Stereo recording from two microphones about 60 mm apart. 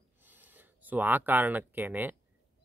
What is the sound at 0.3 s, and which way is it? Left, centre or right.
Speech, right.